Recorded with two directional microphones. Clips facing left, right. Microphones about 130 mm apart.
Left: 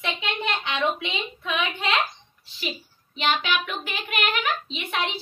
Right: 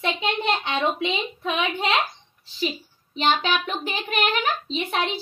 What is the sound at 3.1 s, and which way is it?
A child's voice, 35° right (ahead or behind).